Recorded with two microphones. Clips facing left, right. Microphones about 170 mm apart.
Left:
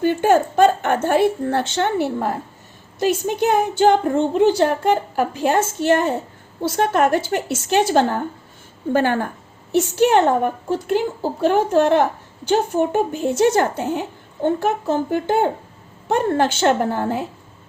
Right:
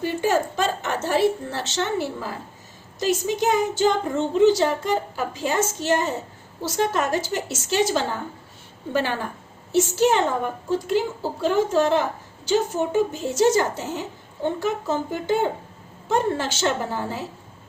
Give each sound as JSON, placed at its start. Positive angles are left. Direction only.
{"t": 0.0, "sound": "a woman's voice", "side_deg": 55}